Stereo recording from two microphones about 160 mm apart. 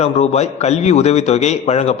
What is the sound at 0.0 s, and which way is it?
A man's voice, 40° left (ahead or behind).